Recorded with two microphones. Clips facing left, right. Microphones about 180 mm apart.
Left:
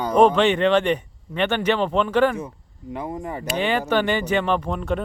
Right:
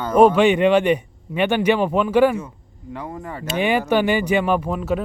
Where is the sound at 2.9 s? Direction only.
20° left (ahead or behind).